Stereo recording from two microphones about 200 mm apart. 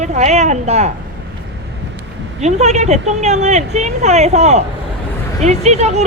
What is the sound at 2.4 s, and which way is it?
Speech, 35° right (ahead or behind).